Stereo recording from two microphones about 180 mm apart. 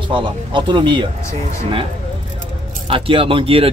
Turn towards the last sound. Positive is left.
turn(degrees=-30)  # may be behind; listen again after turning